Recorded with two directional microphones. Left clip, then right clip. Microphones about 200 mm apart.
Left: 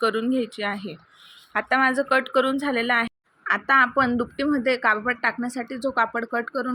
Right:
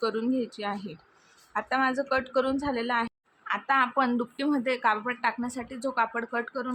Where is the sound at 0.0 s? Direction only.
5° left (ahead or behind).